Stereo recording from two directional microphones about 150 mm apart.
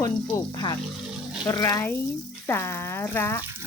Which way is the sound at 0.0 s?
25° left (ahead or behind).